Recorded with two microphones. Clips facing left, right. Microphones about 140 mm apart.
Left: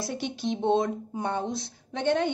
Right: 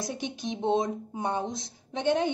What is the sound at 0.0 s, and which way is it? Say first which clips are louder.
A woman's voice: left 3 dB; 15° right (ahead or behind).